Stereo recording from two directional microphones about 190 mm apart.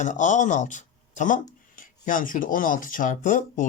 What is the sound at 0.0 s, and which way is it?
Speech, 40° left (ahead or behind).